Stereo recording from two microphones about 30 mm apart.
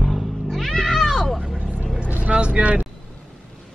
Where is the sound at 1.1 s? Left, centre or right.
Centre.